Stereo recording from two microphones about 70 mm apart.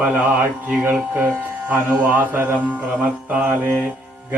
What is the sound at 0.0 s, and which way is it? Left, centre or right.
Speech, right.